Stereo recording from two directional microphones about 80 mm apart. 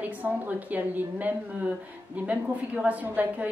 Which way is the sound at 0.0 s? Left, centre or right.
Right.